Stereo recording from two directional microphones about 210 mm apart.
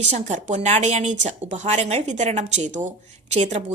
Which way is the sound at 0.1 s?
35° right (ahead or behind).